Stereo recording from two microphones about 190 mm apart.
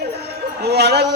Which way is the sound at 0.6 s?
60° right (ahead or behind).